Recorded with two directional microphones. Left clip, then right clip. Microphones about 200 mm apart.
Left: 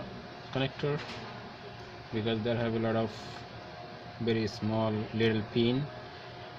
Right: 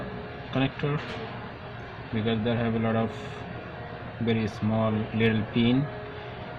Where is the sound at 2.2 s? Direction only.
30° left (ahead or behind).